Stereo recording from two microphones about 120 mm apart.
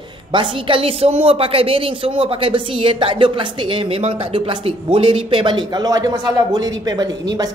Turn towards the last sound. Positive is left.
turn(degrees=-35)  # may be behind; listen again after turning